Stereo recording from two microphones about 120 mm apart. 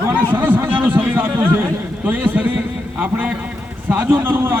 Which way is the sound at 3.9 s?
20° right (ahead or behind).